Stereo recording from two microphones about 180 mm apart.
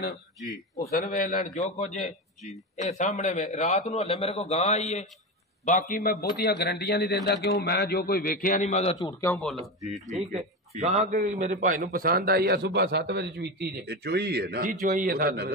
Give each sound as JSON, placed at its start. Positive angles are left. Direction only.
{"t": 0.9, "sound": "a man's voice", "side_deg": 50}
{"t": 8.9, "sound": "a man's voice", "side_deg": 15}
{"t": 10.0, "sound": "a man's voice", "side_deg": -40}